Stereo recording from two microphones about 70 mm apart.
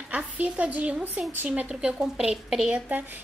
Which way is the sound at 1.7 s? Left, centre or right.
Centre.